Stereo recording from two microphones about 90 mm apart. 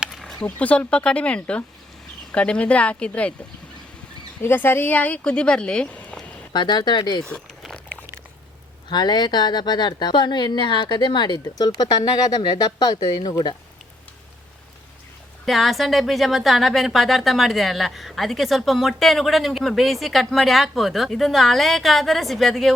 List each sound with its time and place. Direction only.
0.1 s a sound: 5° left (ahead or behind)
0.4 s speech: 15° left (ahead or behind)
4.4 s speech: 25° left (ahead or behind)
6.5 s a woman's voice: 55° left (ahead or behind)
7.2 s speech: 10° left (ahead or behind)
8.9 s a woman's voice: 55° left (ahead or behind)
15.4 s speech: centre (ahead or behind)